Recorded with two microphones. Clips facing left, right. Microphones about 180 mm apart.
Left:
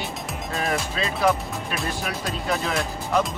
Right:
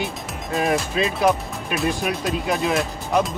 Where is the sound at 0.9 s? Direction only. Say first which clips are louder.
Right 3 dB; 15° right (ahead or behind).